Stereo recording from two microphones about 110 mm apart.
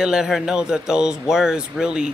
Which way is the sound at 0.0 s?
5° right (ahead or behind).